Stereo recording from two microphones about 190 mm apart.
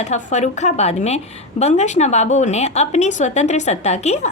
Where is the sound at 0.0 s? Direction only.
35° left (ahead or behind).